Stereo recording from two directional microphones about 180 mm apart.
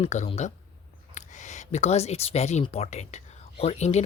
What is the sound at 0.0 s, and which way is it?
Speech, 35° left (ahead or behind).